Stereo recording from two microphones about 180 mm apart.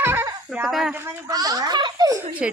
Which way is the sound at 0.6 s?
Centre (ahead or behind).